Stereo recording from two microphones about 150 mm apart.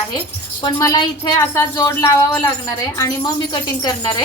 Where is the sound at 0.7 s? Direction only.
20° left (ahead or behind).